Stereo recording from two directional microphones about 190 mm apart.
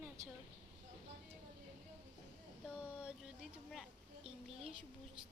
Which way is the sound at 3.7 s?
Centre (ahead or behind).